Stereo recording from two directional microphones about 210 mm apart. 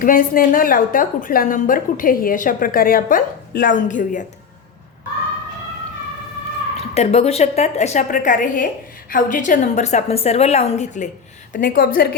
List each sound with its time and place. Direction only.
0.0 s a woman's voice: 40° left (ahead or behind)
6.9 s a woman's voice: 30° left (ahead or behind)